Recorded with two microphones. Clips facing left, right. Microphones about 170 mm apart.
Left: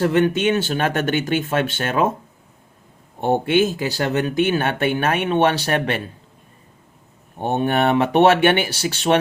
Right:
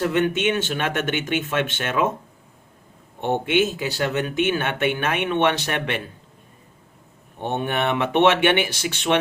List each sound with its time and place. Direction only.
0.0 s speech: 35° left (ahead or behind)
3.2 s speech: 35° left (ahead or behind)
7.3 s speech: 40° left (ahead or behind)